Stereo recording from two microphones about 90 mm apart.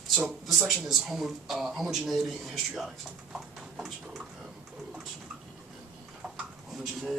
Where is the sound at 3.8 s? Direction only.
5° right (ahead or behind).